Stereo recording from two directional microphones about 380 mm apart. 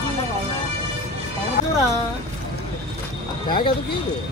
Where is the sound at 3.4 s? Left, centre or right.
Centre.